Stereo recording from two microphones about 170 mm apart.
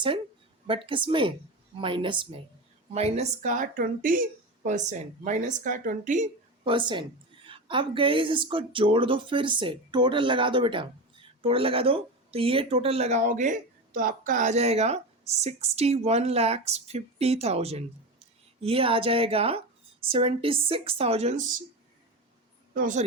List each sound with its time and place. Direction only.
0.7 s a woman's voice: 30° right (ahead or behind)
2.9 s a woman's voice: 40° right (ahead or behind)
6.7 s a woman's voice: 30° right (ahead or behind); by 21.5 s 45° right (ahead or behind)
22.7 s a woman's voice: 50° right (ahead or behind)